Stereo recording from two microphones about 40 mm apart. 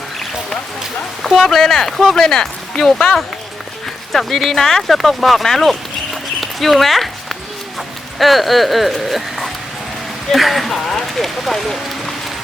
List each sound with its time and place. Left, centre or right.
1.2 s speech: centre
6.4 s a sound: centre
7.8 s speech: centre